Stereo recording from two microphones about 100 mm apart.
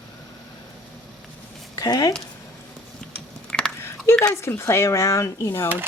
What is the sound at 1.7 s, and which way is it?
Speech, 35° left (ahead or behind).